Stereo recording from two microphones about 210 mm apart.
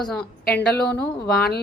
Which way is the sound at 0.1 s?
5° left (ahead or behind).